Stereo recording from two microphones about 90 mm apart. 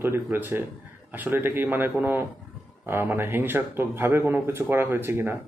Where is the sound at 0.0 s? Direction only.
25° right (ahead or behind).